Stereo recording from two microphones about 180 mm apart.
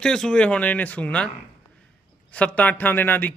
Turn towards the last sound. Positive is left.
turn(degrees=10)  # may be behind; listen again after turning